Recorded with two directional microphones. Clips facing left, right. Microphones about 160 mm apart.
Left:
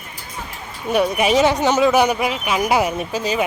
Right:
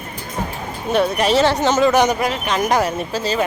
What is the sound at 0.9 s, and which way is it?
Speech, 10° left (ahead or behind).